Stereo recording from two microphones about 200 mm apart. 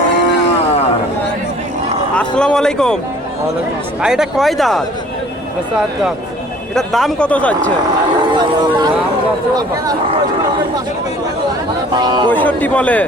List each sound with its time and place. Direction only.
2.1 s speech: 5° left (ahead or behind)
4.0 s speech: 5° right (ahead or behind)
6.7 s speech: centre (ahead or behind)
8.3 s speech: 20° right (ahead or behind)
11.9 s speech: 20° right (ahead or behind)
12.3 s a man's voice: 10° left (ahead or behind)